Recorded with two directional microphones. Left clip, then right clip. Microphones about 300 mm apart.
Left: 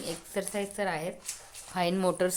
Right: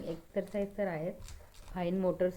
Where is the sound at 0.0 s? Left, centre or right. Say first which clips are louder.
Left 3 dB; centre.